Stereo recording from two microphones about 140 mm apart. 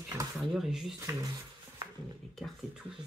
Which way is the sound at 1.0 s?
25° right (ahead or behind).